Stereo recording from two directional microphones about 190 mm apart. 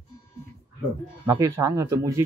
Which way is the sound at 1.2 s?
15° right (ahead or behind).